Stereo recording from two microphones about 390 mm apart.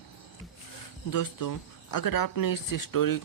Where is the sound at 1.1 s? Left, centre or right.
Left.